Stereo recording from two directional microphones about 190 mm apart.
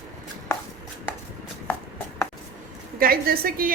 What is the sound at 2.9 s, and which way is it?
Speech, 50° right (ahead or behind).